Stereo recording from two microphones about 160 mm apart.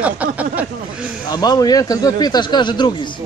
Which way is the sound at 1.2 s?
25° left (ahead or behind).